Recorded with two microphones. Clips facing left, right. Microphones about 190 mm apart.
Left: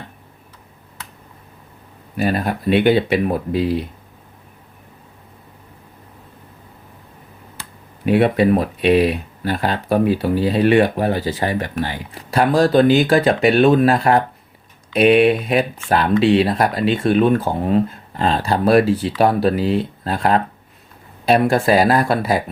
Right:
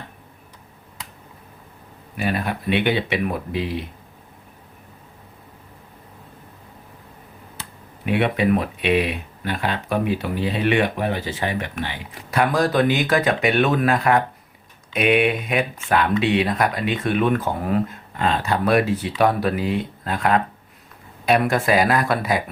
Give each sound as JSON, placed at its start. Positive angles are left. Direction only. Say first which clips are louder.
{"t": 2.1, "sound": "speech", "louder": "left 4 dB", "side_deg": 40}
{"t": 8.0, "sound": "speech", "louder": "left 5 dB", "side_deg": 40}